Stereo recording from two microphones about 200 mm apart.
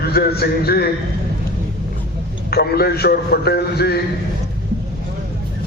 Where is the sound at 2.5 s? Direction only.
55° left (ahead or behind).